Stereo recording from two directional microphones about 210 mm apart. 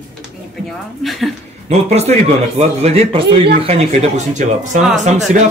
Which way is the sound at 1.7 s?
30° right (ahead or behind).